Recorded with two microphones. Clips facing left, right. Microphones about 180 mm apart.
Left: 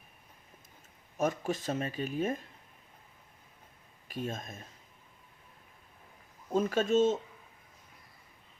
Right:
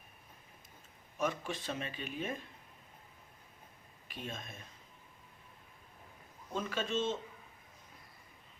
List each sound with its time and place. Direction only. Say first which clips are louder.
1.2 s speech: left 5 dB; 45° left (ahead or behind)
4.1 s speech: left 7 dB; 45° left (ahead or behind)
6.5 s speech: left 9 dB; 45° left (ahead or behind)